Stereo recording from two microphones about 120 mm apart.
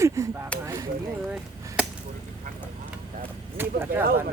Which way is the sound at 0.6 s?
25° right (ahead or behind).